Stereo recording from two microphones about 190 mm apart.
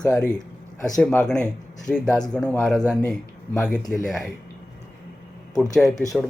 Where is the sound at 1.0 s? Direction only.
5° left (ahead or behind).